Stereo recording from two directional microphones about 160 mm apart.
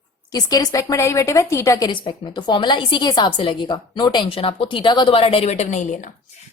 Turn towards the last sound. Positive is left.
turn(degrees=50)  # may be behind; listen again after turning